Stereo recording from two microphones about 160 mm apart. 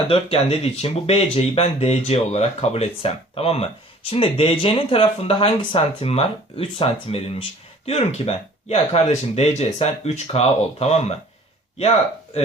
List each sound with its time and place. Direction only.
0.1 s speech: 40° left (ahead or behind)